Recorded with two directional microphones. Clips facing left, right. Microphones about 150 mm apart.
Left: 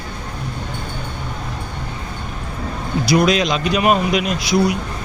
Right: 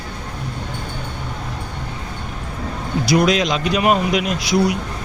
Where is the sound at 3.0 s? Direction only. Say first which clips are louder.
Left 1 dB; centre (ahead or behind).